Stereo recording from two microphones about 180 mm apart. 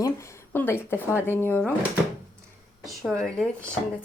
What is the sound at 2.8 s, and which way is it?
Speech, centre (ahead or behind).